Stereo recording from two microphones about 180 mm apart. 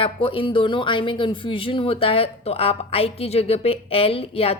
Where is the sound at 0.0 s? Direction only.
30° left (ahead or behind).